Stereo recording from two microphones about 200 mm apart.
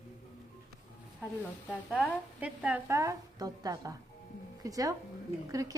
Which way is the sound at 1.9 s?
5° right (ahead or behind).